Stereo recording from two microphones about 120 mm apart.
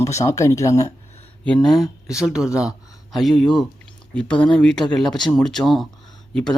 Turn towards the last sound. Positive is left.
turn(degrees=5)  # may be behind; listen again after turning